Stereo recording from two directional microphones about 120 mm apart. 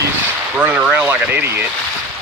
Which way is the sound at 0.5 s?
10° right (ahead or behind).